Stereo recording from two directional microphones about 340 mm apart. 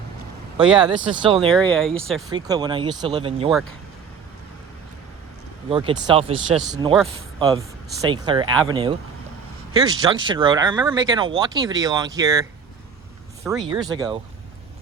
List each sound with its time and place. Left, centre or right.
0.7 s speech: centre
1.1 s speech: centre
1.5 s speech: centre
2.3 s speech: centre
5.6 s speech: centre
6.9 s speech: centre
13.7 s speech: centre